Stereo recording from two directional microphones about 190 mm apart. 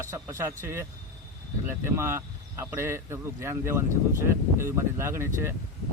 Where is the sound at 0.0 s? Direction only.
15° right (ahead or behind).